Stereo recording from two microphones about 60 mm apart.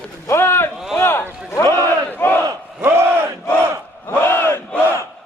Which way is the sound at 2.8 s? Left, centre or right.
Right.